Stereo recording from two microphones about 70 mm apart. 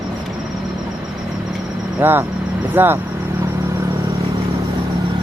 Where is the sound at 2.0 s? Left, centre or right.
Right.